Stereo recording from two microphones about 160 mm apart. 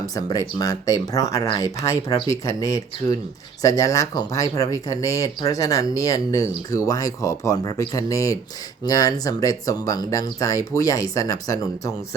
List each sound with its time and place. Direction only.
0.0 s speech: 20° left (ahead or behind)